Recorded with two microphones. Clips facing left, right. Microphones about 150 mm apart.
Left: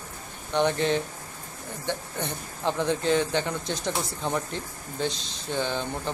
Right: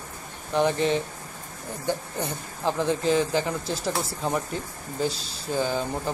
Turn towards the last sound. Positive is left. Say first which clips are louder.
# right 3 dB
turn(degrees=-5)  # may be behind; listen again after turning